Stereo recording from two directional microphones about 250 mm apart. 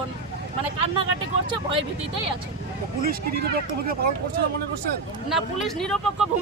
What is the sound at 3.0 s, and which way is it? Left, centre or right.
Speech, right.